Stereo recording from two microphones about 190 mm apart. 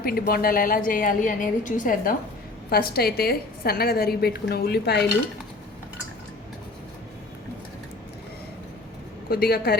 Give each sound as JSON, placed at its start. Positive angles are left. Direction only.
{"t": 0.0, "sound": "a woman's voice", "side_deg": 50}
{"t": 9.3, "sound": "a woman's voice", "side_deg": 55}